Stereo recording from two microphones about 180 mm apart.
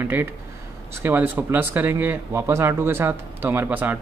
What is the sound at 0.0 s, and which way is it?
Speech, 10° right (ahead or behind).